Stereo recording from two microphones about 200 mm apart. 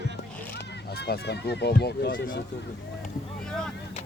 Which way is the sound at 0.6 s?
55° left (ahead or behind).